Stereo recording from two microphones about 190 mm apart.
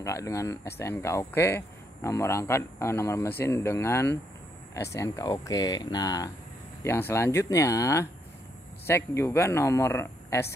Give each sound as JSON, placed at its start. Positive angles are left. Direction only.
{"t": 0.0, "sound": "speech", "side_deg": 15}